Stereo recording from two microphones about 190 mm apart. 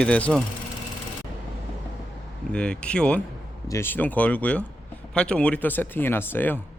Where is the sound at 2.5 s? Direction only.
5° left (ahead or behind).